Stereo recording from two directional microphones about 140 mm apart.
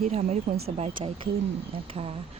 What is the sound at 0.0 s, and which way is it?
Speech, 50° right (ahead or behind).